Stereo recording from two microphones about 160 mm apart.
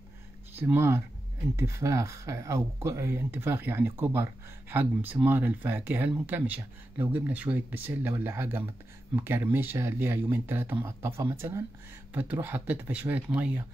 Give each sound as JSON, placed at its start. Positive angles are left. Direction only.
{"t": 0.6, "sound": "speech", "side_deg": -15}